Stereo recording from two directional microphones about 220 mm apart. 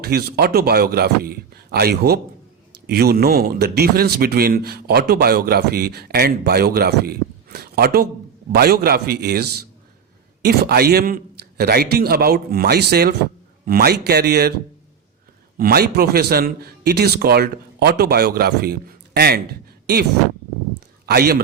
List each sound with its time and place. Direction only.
0.0 s speech: 45° right (ahead or behind)
15.5 s speech: 45° right (ahead or behind)
21.1 s speech: 45° right (ahead or behind)